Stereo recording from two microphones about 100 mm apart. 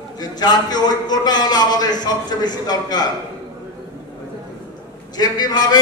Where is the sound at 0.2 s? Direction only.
45° left (ahead or behind).